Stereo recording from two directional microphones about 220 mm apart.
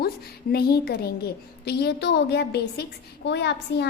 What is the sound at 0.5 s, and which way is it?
A woman's voice, 45° left (ahead or behind).